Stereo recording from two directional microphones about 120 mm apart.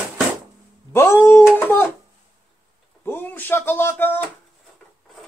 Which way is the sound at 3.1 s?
15° left (ahead or behind).